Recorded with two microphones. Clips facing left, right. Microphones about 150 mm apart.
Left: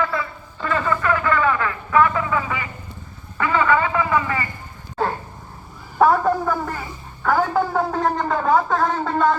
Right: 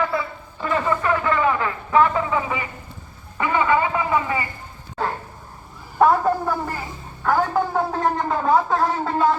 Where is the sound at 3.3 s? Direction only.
15° right (ahead or behind).